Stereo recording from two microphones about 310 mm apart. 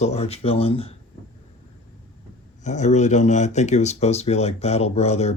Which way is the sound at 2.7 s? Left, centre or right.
Left.